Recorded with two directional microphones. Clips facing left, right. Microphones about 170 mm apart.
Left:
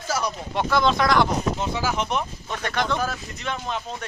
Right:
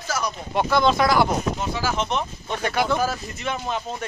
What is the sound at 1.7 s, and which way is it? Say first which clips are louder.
Speech: even; 15° left (ahead or behind).